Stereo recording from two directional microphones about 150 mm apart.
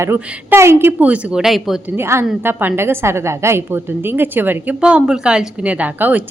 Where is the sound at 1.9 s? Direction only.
15° right (ahead or behind).